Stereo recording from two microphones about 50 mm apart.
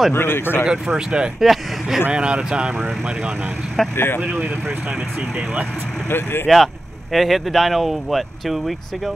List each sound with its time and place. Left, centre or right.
0.1 s speech: left
0.7 s speech: centre
1.4 s speech: centre
2.0 s speech: right
3.9 s speech: left
4.2 s speech: right
6.0 s speech: left
6.4 s speech: centre